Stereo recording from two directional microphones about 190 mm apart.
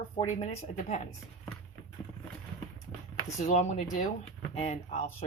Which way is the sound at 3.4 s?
40° left (ahead or behind).